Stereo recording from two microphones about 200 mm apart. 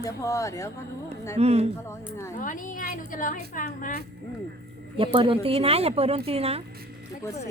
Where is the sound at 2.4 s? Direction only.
40° left (ahead or behind).